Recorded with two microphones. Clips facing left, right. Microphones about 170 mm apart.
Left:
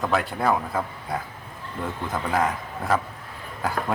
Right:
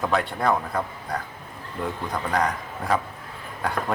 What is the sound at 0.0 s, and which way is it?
Speech, centre (ahead or behind).